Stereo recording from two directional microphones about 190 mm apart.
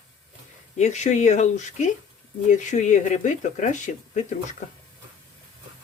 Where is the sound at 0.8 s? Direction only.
35° left (ahead or behind).